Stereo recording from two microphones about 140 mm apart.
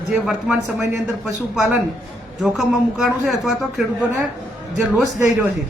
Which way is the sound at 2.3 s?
Centre (ahead or behind).